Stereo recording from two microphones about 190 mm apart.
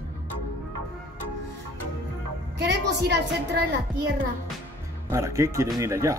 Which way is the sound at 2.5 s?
65° right (ahead or behind).